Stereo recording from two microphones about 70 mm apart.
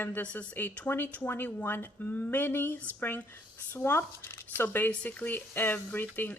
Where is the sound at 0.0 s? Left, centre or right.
Left.